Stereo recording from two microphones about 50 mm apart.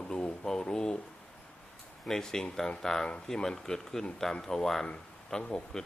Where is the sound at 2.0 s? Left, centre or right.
Centre.